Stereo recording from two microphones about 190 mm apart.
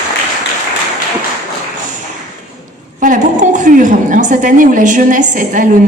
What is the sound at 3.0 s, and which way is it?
A woman's voice, 40° right (ahead or behind).